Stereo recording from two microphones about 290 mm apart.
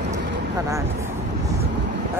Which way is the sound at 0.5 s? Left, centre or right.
Centre.